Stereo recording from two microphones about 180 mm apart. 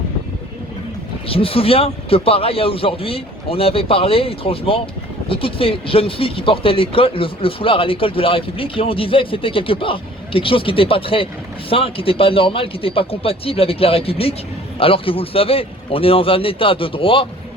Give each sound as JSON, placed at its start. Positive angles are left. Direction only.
{"t": 1.3, "sound": "a man's voice", "side_deg": 30}